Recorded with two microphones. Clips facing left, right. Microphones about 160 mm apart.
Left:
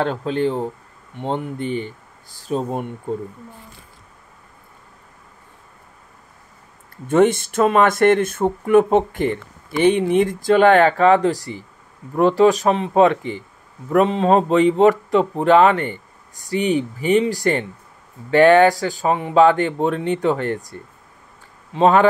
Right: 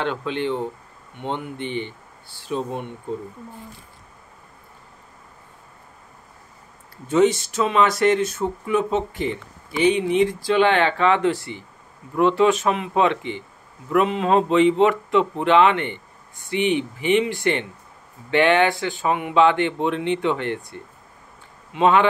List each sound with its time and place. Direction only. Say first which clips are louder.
0.0 s speech: left 4 dB; 40° left (ahead or behind)
7.1 s speech: left 2 dB; 50° left (ahead or behind)